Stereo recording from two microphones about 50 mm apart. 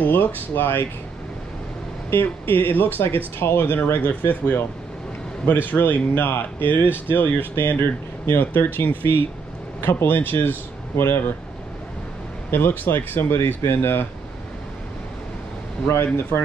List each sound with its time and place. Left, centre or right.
0.0 s speech: left
2.0 s speech: left
12.4 s speech: left
16.2 s speech: left